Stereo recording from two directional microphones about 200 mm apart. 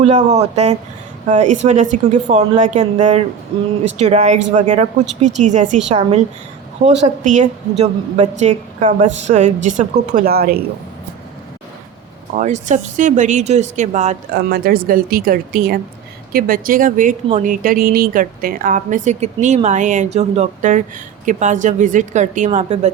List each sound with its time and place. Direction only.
0.0 s a woman's voice: 35° right (ahead or behind)
12.4 s a woman's voice: 35° right (ahead or behind)
14.3 s a woman's voice: 50° right (ahead or behind); by 22.9 s 35° right (ahead or behind)